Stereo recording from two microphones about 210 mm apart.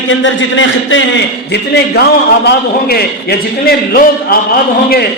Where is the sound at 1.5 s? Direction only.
50° left (ahead or behind).